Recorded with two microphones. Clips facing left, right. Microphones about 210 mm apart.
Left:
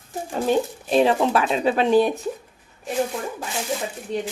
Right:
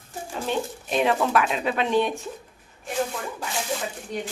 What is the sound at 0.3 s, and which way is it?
A woman's voice, 35° left (ahead or behind).